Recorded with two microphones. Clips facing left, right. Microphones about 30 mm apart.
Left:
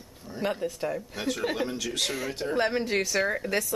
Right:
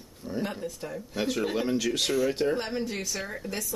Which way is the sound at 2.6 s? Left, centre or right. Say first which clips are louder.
Left 6 dB; left.